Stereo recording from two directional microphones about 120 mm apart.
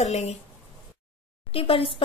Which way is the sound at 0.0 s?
65° left (ahead or behind).